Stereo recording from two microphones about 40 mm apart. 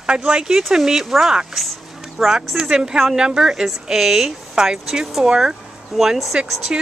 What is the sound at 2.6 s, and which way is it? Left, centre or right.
Speech, centre.